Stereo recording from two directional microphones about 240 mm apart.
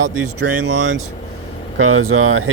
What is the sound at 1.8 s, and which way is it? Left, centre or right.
Speech, right.